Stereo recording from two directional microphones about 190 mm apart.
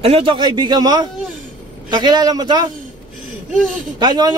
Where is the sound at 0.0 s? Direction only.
30° right (ahead or behind).